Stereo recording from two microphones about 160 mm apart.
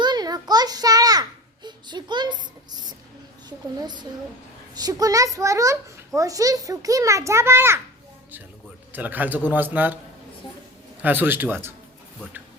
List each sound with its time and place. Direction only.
0.0 s a sound: 25° right (ahead or behind)
1.6 s a child's voice: 30° right (ahead or behind)
3.8 s a child's voice: 25° right (ahead or behind)
8.9 s a man's voice: 10° right (ahead or behind)
11.0 s a man's voice: 10° right (ahead or behind)